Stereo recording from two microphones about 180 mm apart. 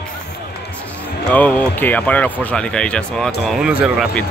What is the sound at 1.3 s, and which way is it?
Speech, 10° left (ahead or behind).